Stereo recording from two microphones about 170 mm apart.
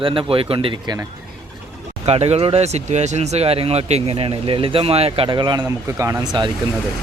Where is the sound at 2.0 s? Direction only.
40° right (ahead or behind); by 6.5 s 20° right (ahead or behind).